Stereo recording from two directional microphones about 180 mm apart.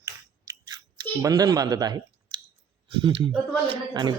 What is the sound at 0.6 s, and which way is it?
Speech, 20° right (ahead or behind).